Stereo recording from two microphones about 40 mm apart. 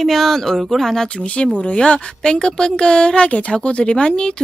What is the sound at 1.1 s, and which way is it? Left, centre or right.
Speech, left.